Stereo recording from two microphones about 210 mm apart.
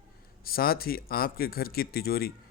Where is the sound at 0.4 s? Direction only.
45° left (ahead or behind).